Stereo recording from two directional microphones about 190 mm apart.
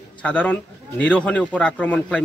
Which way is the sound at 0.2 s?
5° left (ahead or behind).